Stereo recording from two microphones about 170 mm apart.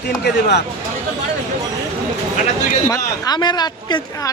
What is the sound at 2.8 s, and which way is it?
Speech, 20° left (ahead or behind).